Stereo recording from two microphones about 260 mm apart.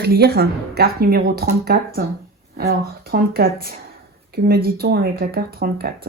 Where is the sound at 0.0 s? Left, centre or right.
Right.